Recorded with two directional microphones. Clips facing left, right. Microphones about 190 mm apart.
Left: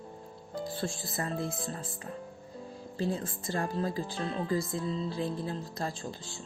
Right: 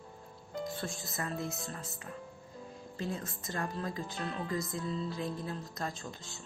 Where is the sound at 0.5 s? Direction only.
30° left (ahead or behind).